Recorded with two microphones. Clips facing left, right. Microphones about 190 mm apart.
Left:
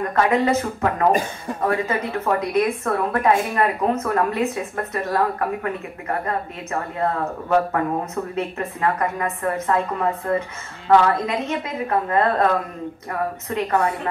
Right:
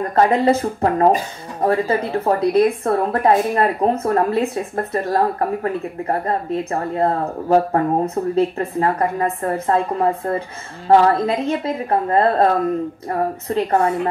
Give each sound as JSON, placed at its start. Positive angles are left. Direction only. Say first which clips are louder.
{"t": 0.1, "sound": "speech", "louder": "right 4 dB", "side_deg": -35}